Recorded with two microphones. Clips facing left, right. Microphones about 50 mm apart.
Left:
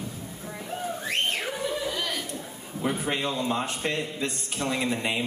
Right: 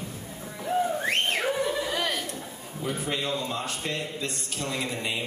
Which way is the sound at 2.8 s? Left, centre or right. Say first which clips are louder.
Left 2 dB; left.